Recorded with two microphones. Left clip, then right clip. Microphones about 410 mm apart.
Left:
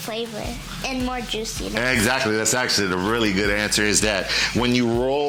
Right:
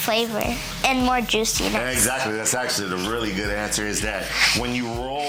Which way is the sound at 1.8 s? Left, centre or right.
Left.